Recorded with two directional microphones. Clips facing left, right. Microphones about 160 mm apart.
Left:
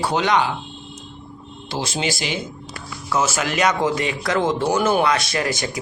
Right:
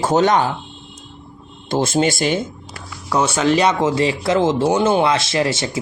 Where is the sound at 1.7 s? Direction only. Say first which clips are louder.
Right 8 dB; 50° right (ahead or behind).